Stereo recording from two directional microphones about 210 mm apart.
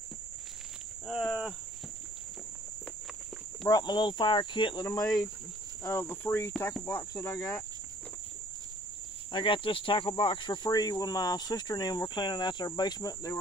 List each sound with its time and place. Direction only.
1.0 s speech: centre (ahead or behind)
3.6 s speech: 20° left (ahead or behind)
5.0 s speech: 5° left (ahead or behind)
5.9 s cricket: 10° left (ahead or behind)
9.3 s speech: 25° left (ahead or behind)